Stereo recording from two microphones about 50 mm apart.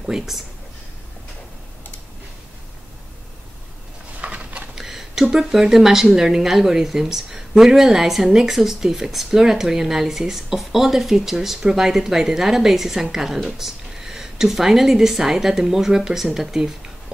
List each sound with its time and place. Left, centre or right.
0.0 s speech: centre
4.2 s a sound: right
4.7 s speech: centre